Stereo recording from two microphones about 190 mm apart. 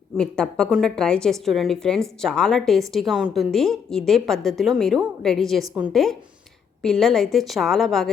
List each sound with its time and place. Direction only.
0.2 s a woman's voice: 5° left (ahead or behind)